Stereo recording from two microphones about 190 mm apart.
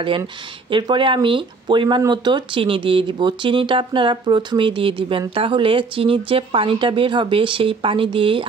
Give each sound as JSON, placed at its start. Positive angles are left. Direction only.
{"t": 0.7, "sound": "speech", "side_deg": -25}